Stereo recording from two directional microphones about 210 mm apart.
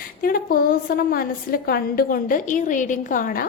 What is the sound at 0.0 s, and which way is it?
A woman's voice, 45° left (ahead or behind).